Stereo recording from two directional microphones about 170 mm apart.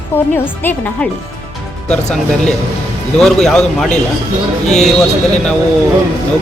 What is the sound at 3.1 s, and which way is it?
Speech, 5° left (ahead or behind).